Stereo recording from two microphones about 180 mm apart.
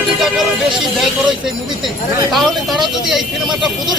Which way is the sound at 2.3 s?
Centre (ahead or behind).